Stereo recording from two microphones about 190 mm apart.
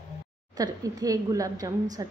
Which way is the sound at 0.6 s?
20° right (ahead or behind).